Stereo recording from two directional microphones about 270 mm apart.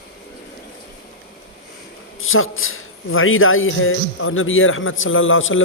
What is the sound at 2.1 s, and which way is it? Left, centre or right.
A man's voice, left.